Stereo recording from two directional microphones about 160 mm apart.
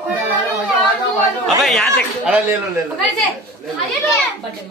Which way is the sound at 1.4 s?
Centre (ahead or behind).